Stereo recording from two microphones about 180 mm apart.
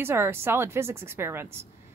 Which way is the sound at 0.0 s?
15° right (ahead or behind).